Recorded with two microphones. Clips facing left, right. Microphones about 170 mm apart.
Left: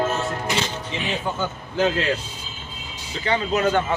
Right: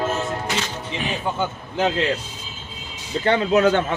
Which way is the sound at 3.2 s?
60° right (ahead or behind).